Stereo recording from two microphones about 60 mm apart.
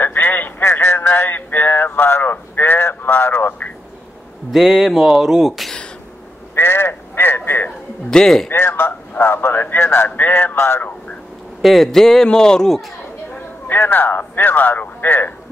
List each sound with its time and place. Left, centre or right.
0.0 s a sound: left
4.5 s speech: centre
6.5 s a sound: left
8.1 s a man's voice: centre
8.5 s a man's voice: left
11.6 s a man's voice: centre
13.7 s a man's voice: left